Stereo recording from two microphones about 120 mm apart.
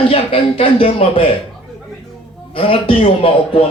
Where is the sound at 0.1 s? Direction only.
50° left (ahead or behind).